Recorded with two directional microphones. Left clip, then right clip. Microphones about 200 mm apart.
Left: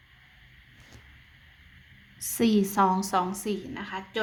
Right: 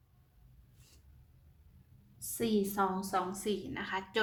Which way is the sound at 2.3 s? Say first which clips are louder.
Left 8 dB; 40° left (ahead or behind).